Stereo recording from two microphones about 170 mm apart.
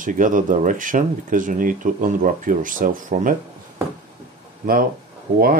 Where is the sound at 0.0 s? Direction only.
50° right (ahead or behind).